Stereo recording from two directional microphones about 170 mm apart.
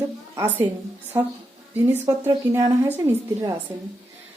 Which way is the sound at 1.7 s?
15° right (ahead or behind).